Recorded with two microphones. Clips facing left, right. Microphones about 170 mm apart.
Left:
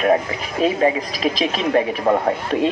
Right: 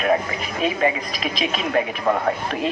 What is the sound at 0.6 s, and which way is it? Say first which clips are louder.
Speech: left 4 dB; 35° left (ahead or behind).